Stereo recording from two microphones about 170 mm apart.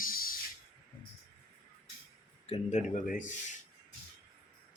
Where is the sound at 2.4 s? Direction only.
35° left (ahead or behind).